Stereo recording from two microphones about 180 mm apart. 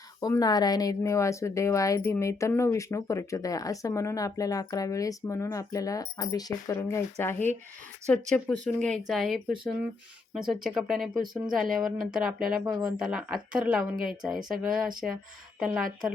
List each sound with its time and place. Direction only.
0.2 s speech: 20° left (ahead or behind); by 15.9 s centre (ahead or behind)